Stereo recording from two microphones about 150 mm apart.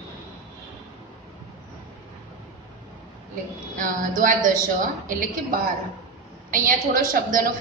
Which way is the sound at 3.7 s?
60° right (ahead or behind).